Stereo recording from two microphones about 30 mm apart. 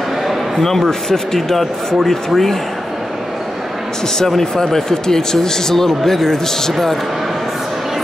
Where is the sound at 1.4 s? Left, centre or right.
Centre.